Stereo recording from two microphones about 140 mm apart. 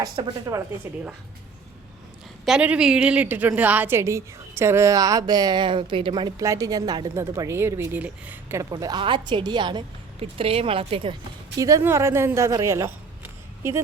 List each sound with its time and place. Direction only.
0.2 s a woman's voice: 35° right (ahead or behind)
2.4 s a woman's voice: 5° right (ahead or behind); by 6.3 s 35° right (ahead or behind)
6.4 s a woman's voice: 25° right (ahead or behind)
8.7 s a woman's voice: 30° right (ahead or behind)
11.5 s speech: 25° right (ahead or behind)